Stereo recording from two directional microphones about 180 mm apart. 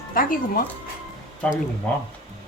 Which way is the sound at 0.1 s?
50° left (ahead or behind).